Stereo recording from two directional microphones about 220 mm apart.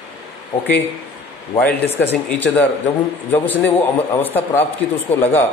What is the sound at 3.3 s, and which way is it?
A man's voice, 10° left (ahead or behind).